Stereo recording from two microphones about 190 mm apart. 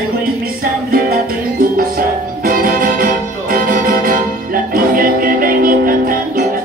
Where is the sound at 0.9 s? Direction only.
50° right (ahead or behind).